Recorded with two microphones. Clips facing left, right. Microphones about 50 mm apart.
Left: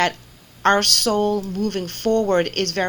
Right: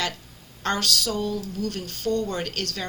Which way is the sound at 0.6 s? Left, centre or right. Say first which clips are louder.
Left 8 dB; left.